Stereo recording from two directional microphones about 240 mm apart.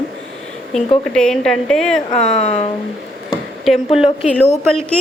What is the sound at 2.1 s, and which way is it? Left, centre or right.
Speech, left.